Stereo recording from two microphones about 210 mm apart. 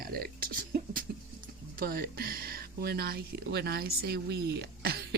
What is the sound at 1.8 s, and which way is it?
Speech, 45° right (ahead or behind).